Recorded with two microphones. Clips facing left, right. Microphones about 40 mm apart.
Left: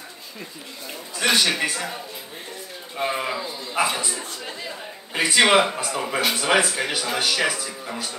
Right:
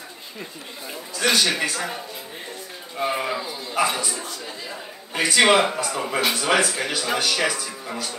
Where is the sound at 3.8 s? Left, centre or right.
Left; by 6.3 s centre.